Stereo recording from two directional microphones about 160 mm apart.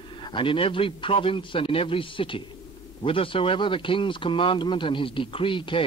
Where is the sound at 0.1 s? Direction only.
35° left (ahead or behind).